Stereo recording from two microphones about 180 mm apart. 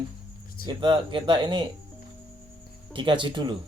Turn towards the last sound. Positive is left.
turn(degrees=-25)  # may be behind; listen again after turning